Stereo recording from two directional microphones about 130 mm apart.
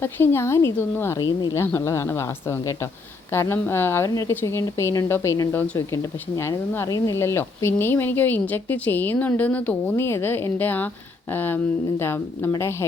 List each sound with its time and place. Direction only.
0.0 s a woman's voice: 20° left (ahead or behind)